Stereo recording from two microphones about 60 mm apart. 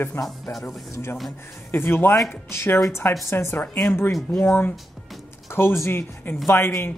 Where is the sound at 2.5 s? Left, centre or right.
Left.